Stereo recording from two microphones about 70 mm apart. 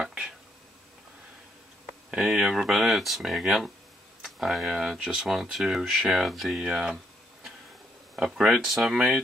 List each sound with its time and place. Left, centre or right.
0.0 s a sound: centre
2.0 s speech: centre
8.2 s speech: centre
8.9 s speech: centre